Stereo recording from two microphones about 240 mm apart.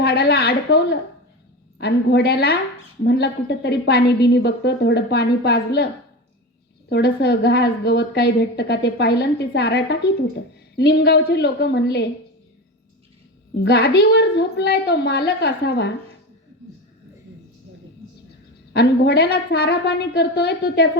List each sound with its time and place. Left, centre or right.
0.0 s a woman's voice: left
6.9 s a woman's voice: left
13.6 s a woman's voice: left
18.7 s a woman's voice: left